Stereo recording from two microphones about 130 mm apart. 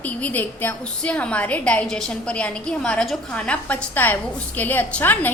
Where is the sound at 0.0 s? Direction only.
10° left (ahead or behind).